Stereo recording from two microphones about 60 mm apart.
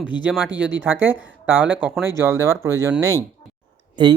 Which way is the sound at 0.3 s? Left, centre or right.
Right.